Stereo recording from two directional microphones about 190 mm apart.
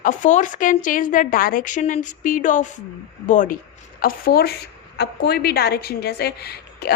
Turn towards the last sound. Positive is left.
turn(degrees=55)  # may be behind; listen again after turning